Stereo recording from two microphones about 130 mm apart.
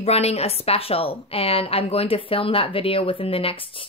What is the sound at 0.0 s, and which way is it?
A woman's voice, 55° left (ahead or behind).